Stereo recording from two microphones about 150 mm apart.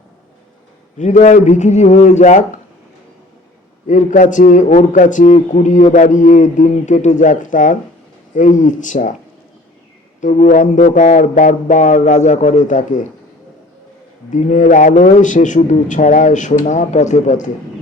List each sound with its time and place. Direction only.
0.9 s a man's voice: 55° left (ahead or behind)
3.8 s a man's voice: 55° left (ahead or behind)
10.2 s a man's voice: 55° left (ahead or behind)
14.3 s a man's voice: 55° left (ahead or behind)